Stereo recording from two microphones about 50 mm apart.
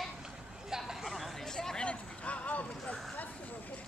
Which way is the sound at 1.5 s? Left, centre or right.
Centre.